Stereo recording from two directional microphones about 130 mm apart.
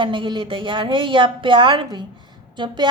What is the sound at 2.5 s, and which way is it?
Speech, 35° right (ahead or behind).